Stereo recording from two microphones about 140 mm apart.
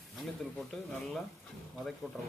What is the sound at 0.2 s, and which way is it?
Speech, centre (ahead or behind).